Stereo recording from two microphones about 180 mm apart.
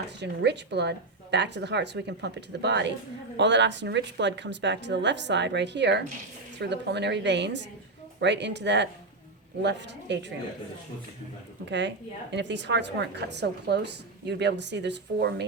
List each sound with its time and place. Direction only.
0.2 s a woman's voice: 70° right (ahead or behind)
11.6 s a woman's voice: 75° right (ahead or behind)